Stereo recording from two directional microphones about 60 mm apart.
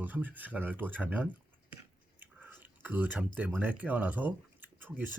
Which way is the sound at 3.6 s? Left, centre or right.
Right.